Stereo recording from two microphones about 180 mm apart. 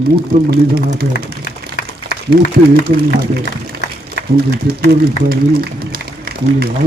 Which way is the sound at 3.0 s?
60° right (ahead or behind).